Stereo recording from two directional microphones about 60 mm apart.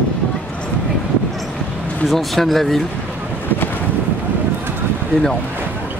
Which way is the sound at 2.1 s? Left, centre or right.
Centre.